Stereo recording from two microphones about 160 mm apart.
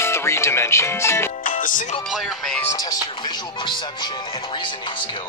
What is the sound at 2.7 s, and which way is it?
Speech, 25° left (ahead or behind).